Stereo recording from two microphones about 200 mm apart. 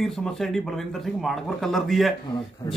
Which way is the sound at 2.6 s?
20° left (ahead or behind).